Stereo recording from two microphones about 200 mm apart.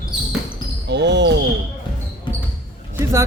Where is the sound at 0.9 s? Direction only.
60° right (ahead or behind).